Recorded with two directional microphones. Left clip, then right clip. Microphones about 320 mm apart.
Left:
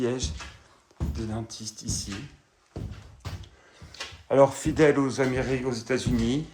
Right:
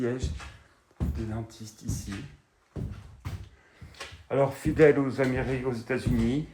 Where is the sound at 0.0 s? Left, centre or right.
Centre.